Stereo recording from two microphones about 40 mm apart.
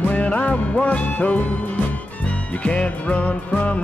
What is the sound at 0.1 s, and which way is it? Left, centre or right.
Music, left.